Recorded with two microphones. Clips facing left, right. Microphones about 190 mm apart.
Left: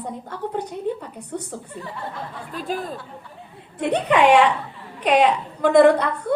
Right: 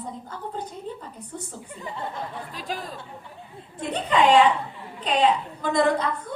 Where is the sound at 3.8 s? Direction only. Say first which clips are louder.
Left 4 dB; 70° left (ahead or behind).